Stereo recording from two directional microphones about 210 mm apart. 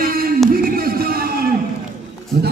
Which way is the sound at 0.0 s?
45° right (ahead or behind).